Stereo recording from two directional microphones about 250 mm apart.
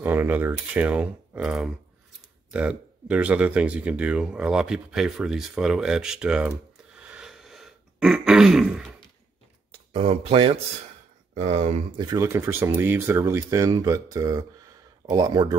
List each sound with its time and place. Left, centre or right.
0.0 s speech: centre
7.1 s throat clearing: centre
9.7 s speech: right